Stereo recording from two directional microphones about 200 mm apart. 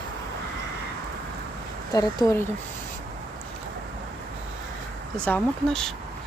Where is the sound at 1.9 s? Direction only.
20° left (ahead or behind).